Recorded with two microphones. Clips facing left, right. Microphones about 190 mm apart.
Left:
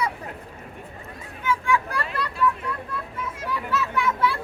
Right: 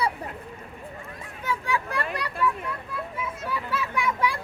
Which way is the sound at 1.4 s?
35° right (ahead or behind).